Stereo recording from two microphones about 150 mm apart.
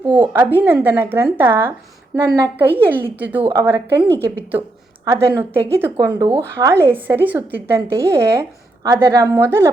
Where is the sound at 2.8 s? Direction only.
15° right (ahead or behind).